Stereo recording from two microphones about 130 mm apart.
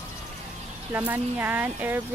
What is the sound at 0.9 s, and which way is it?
Speech, 15° right (ahead or behind).